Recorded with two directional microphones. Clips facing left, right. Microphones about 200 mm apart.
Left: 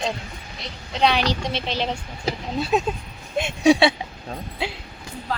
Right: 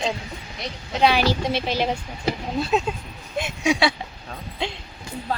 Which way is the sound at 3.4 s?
30° left (ahead or behind).